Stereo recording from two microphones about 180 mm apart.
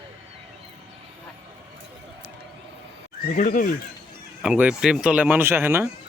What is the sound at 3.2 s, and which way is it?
Speech, 50° left (ahead or behind).